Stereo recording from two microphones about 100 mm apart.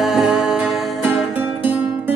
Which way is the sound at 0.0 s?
5° right (ahead or behind).